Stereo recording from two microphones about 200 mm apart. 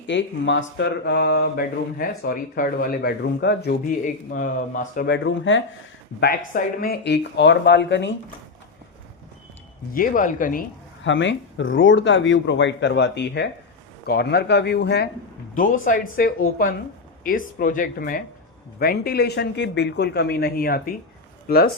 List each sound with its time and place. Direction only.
0.1 s speech: 65° left (ahead or behind); by 5.0 s 40° left (ahead or behind)
5.0 s speech: 65° left (ahead or behind)
6.1 s speech: 50° left (ahead or behind)
9.9 s speech: 45° left (ahead or behind)
11.0 s speech: 65° left (ahead or behind)
15.5 s speech: 40° left (ahead or behind)